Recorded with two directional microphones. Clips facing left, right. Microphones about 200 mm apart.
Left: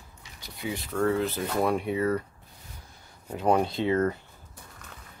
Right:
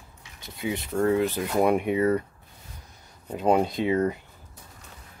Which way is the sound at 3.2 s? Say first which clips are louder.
Right 2 dB; 20° right (ahead or behind).